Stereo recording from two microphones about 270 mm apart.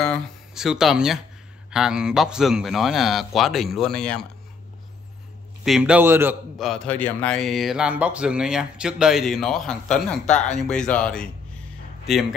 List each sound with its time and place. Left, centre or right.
0.0 s a man's voice: centre
5.6 s a man's voice: centre
10.2 s speech: left
10.6 s a man's voice: centre